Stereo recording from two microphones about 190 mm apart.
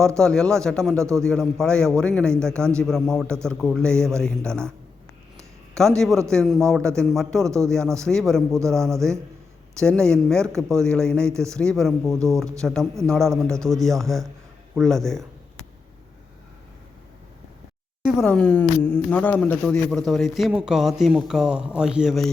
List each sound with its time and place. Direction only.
0.2 s speech: 5° left (ahead or behind)
5.7 s speech: centre (ahead or behind)
7.4 s speech: 15° right (ahead or behind)
7.9 s speech: 5° left (ahead or behind)
18.0 s speech: centre (ahead or behind)